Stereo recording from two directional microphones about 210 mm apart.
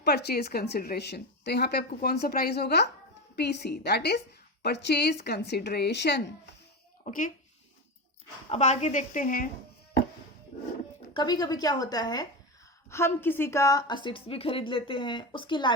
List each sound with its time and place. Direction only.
0.0 s a woman's voice: 50° left (ahead or behind)
7.0 s speech: 40° left (ahead or behind)
8.4 s speech: 30° left (ahead or behind)
11.1 s a woman's voice: 20° left (ahead or behind)